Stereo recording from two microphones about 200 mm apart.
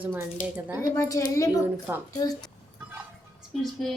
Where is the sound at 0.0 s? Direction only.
10° right (ahead or behind).